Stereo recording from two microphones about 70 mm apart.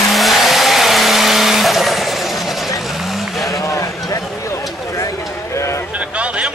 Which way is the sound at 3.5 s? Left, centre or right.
Left.